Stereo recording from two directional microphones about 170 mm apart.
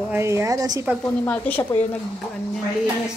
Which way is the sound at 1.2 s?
10° left (ahead or behind).